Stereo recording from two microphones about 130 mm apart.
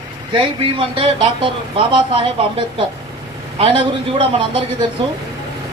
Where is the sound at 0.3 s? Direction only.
40° right (ahead or behind).